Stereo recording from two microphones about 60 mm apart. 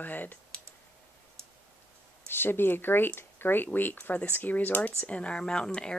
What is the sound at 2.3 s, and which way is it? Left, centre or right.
Speech, left.